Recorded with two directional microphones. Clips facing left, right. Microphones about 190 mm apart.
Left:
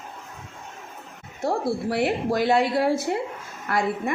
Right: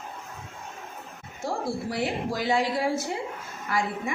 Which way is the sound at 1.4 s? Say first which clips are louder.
Left 5 dB; 60° left (ahead or behind).